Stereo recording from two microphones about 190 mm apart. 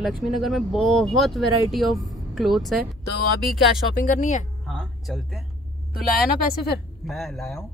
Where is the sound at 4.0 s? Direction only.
40° left (ahead or behind).